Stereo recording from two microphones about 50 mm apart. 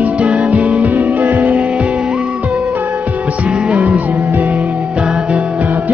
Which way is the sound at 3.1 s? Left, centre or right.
Right.